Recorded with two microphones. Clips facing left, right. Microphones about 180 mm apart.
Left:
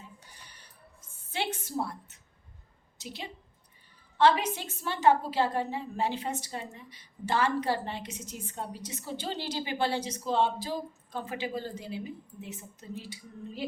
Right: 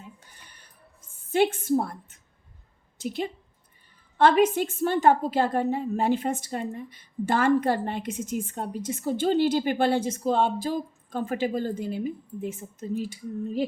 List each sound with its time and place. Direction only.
1.3 s a woman's voice: 50° right (ahead or behind)